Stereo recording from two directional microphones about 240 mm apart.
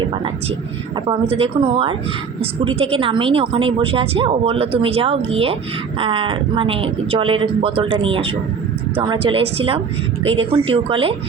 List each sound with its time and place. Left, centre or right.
1.3 s speech: right